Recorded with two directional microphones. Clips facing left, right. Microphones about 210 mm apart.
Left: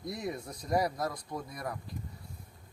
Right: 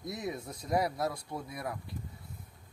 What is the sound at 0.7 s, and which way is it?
Speech, 5° right (ahead or behind).